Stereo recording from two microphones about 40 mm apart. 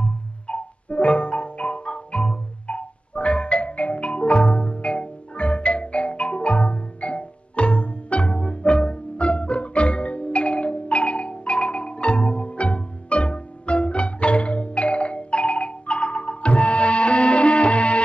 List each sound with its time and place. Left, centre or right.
0.0 s music: left